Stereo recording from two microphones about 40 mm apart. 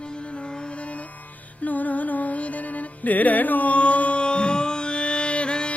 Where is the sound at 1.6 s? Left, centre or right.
Left.